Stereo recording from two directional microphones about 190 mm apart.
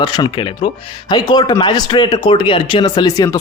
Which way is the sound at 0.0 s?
20° left (ahead or behind).